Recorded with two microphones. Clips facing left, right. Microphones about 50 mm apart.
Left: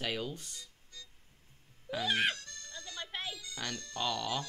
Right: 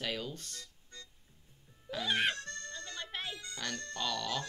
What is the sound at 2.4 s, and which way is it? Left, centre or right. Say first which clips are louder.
Music: right 6 dB; right.